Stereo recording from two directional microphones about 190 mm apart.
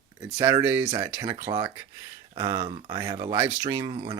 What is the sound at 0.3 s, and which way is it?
Speech, 20° right (ahead or behind).